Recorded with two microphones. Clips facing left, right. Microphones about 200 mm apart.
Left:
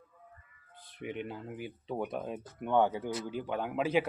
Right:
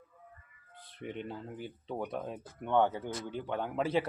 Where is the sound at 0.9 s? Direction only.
10° left (ahead or behind).